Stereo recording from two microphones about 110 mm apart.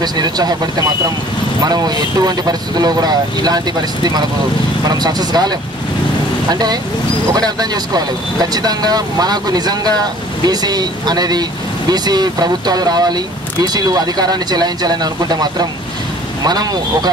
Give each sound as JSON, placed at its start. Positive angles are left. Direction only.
{"t": 0.0, "sound": "speech", "side_deg": -40}